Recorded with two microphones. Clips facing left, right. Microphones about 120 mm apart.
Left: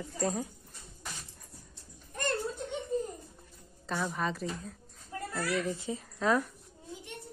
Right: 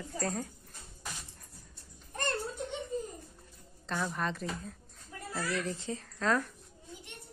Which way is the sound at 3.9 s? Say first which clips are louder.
Left 1 dB; 5° left (ahead or behind).